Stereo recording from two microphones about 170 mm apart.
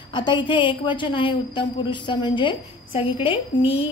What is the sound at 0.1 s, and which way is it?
A woman's voice, 25° left (ahead or behind).